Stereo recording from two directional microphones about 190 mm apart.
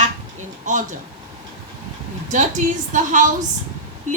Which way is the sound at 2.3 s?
40° right (ahead or behind).